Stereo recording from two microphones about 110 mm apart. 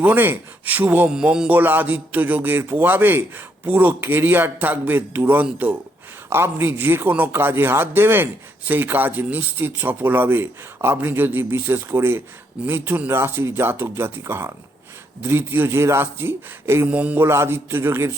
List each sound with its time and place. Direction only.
0.0 s a man's voice: 20° right (ahead or behind)